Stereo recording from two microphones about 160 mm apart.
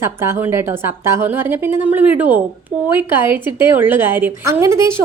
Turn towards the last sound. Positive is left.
turn(degrees=-15)  # may be behind; listen again after turning